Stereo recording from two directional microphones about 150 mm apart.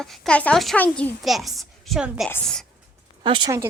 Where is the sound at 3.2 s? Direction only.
30° right (ahead or behind).